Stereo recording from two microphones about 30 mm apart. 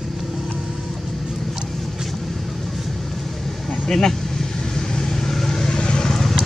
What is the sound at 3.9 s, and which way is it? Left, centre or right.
Speech, centre.